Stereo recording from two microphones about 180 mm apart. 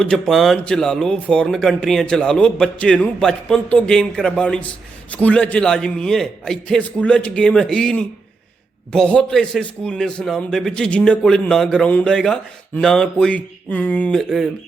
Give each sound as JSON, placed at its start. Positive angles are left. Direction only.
{"t": 0.0, "sound": "a man's voice", "side_deg": 0}